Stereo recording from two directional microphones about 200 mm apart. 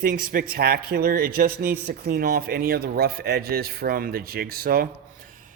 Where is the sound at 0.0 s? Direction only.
45° right (ahead or behind).